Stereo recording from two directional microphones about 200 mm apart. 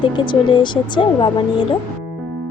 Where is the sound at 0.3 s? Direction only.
25° left (ahead or behind).